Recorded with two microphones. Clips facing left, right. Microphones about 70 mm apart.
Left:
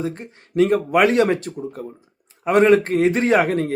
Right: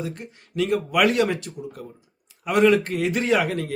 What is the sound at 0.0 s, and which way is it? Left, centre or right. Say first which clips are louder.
A man's voice: left 5 dB; left.